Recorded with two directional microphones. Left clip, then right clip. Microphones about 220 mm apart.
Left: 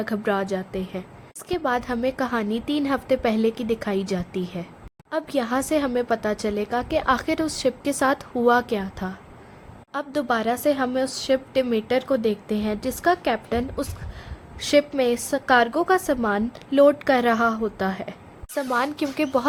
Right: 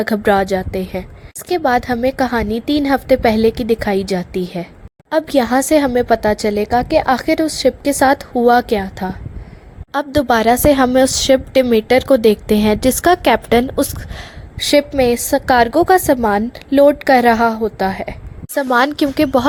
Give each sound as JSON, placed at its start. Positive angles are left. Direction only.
{"t": 0.0, "sound": "a woman's voice", "side_deg": -30}